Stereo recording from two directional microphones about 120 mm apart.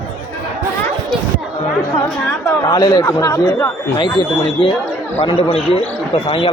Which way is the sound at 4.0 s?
40° left (ahead or behind).